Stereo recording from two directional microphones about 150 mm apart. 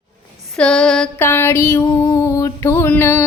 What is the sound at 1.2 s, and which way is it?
Music, 15° left (ahead or behind).